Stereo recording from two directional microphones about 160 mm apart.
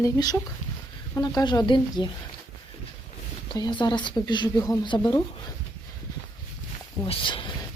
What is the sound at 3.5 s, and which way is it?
Speech, 25° left (ahead or behind).